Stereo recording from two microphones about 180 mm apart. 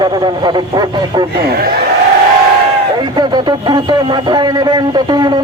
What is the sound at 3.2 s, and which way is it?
A man's voice, 25° right (ahead or behind).